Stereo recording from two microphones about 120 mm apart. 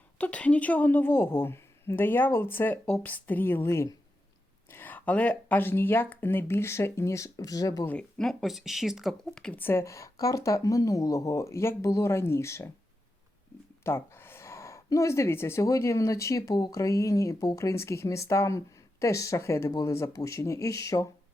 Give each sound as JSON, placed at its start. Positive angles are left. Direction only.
{"t": 0.2, "sound": "a woman's voice", "side_deg": 10}
{"t": 7.9, "sound": "speech", "side_deg": 5}
{"t": 13.8, "sound": "speech", "side_deg": 20}